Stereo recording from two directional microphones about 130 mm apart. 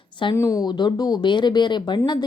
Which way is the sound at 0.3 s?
25° left (ahead or behind).